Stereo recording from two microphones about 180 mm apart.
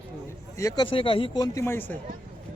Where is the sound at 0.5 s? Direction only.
20° left (ahead or behind).